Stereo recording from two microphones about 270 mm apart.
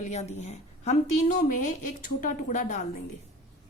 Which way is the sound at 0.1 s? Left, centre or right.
Left.